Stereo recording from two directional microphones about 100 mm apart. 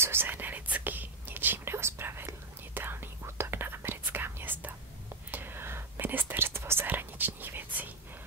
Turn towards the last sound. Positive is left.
turn(degrees=-20)  # may be behind; listen again after turning